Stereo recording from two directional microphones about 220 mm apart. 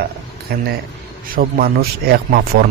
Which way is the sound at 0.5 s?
45° right (ahead or behind).